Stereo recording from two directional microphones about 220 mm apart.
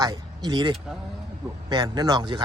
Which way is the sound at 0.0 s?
20° right (ahead or behind).